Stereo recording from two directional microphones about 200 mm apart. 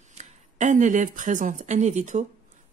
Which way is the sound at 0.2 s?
35° right (ahead or behind).